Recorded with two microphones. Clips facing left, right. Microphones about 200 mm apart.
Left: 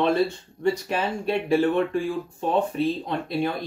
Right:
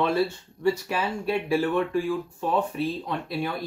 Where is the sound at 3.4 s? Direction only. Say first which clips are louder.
Left 5 dB; 25° left (ahead or behind).